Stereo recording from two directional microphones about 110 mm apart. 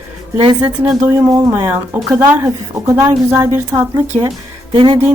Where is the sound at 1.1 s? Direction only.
30° right (ahead or behind).